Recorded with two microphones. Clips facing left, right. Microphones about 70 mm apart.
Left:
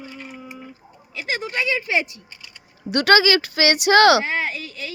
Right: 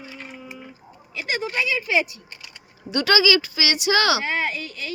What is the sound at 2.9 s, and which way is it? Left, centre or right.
Speech, left.